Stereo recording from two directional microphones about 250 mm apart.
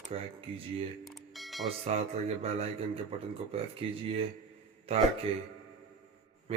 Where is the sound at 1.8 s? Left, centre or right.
Right.